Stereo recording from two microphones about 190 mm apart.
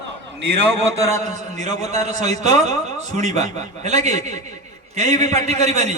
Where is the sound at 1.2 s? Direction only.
20° left (ahead or behind).